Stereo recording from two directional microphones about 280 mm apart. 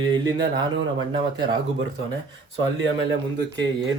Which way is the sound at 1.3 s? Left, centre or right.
Centre.